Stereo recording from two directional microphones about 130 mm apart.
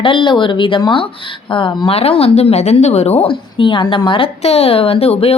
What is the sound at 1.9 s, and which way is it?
A woman's voice, 50° left (ahead or behind).